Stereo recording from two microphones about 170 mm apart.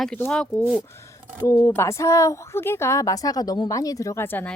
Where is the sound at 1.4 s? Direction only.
20° left (ahead or behind).